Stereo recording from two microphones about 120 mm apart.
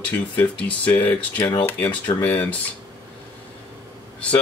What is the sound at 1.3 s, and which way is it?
Speech, 35° left (ahead or behind).